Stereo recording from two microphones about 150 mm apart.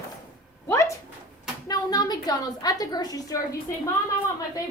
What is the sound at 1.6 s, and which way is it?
A woman's voice, 25° left (ahead or behind).